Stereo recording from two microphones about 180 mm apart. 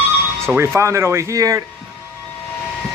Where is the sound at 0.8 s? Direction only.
15° right (ahead or behind).